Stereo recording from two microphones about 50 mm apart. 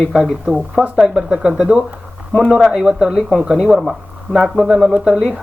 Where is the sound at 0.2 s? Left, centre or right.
Centre.